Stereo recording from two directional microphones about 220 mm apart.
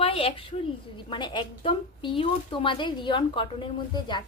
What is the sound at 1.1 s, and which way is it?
Speech, 20° left (ahead or behind).